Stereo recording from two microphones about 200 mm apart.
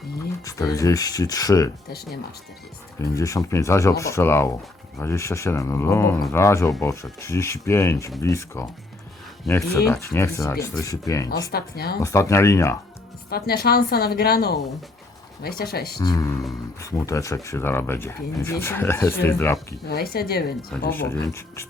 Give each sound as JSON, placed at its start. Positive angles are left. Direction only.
{"t": 0.4, "sound": "speech", "side_deg": 15}
{"t": 3.0, "sound": "speech", "side_deg": 15}
{"t": 11.5, "sound": "a woman's voice", "side_deg": 50}
{"t": 12.0, "sound": "speech", "side_deg": 15}
{"t": 13.3, "sound": "a woman's voice", "side_deg": 50}
{"t": 16.0, "sound": "speech", "side_deg": 15}
{"t": 19.9, "sound": "a woman's voice", "side_deg": 50}
{"t": 20.9, "sound": "speech", "side_deg": 10}